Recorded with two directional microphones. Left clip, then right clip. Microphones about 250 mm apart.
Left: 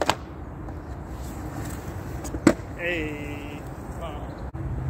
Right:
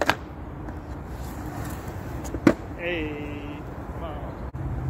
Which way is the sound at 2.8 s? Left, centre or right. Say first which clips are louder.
Left 1 dB; left.